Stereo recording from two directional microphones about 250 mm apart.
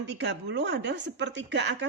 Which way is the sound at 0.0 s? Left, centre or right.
Right.